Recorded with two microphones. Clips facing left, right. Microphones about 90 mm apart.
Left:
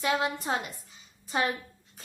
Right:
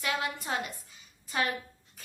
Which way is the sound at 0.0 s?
25° left (ahead or behind).